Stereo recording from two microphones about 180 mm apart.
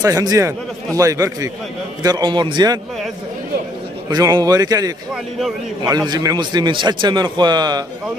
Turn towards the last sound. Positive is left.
turn(degrees=-25)  # may be behind; listen again after turning